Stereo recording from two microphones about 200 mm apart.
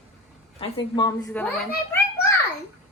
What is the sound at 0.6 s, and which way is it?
Speech, 20° left (ahead or behind).